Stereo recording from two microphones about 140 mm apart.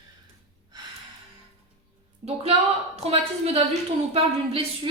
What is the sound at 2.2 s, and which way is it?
A woman's voice, 50° right (ahead or behind).